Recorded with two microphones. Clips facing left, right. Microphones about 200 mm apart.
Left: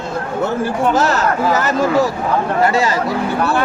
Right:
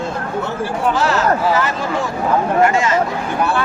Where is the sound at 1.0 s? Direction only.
40° left (ahead or behind).